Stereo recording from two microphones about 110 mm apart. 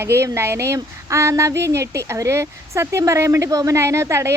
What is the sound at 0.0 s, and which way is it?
Speech, 25° right (ahead or behind).